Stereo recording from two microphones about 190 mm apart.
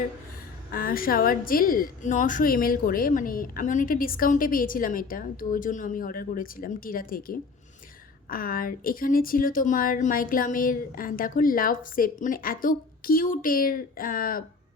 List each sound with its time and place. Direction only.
0.7 s a woman's voice: 50° left (ahead or behind)